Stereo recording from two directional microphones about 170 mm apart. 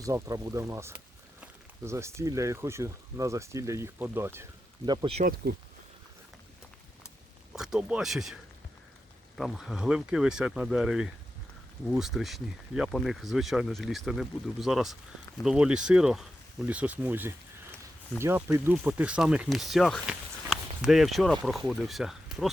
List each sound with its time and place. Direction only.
0.0 s speech: 20° right (ahead or behind)
4.9 s speech: 25° right (ahead or behind)
5.5 s speech: 70° right (ahead or behind)
7.5 s speech: 5° right (ahead or behind)
9.4 s speech: centre (ahead or behind)